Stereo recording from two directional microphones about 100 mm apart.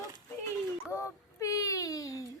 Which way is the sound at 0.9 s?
30° left (ahead or behind).